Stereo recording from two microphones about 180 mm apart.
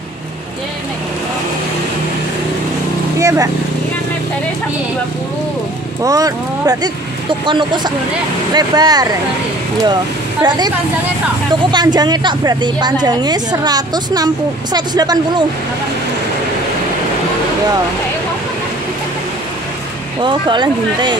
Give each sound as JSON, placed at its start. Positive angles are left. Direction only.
{"t": 3.2, "sound": "vehicle", "side_deg": -15}
{"t": 6.0, "sound": "a woman's voice", "side_deg": -20}
{"t": 10.4, "sound": "a woman's voice", "side_deg": -25}
{"t": 11.7, "sound": "a woman's voice", "side_deg": -25}
{"t": 20.2, "sound": "a woman's voice", "side_deg": -25}